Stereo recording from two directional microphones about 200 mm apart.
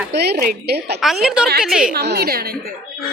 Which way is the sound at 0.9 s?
Centre (ahead or behind).